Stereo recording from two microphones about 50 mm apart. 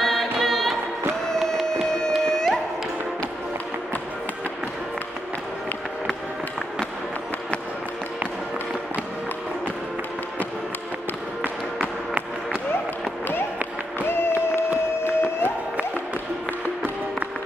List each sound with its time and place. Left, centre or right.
0.0 s music: centre
11.4 s music: right
14.0 s applause: left
15.0 s music: left